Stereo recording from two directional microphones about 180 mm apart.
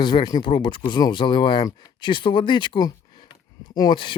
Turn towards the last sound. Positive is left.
turn(degrees=25)  # may be behind; listen again after turning